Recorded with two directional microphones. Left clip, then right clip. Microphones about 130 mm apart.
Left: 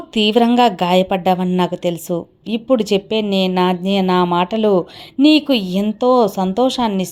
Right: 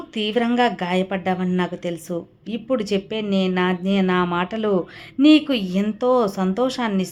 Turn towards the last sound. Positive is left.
turn(degrees=30)  # may be behind; listen again after turning